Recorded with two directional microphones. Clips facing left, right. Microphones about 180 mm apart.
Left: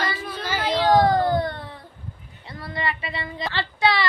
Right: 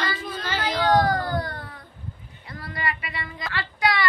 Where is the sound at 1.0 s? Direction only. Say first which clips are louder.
Left 5 dB; 25° left (ahead or behind).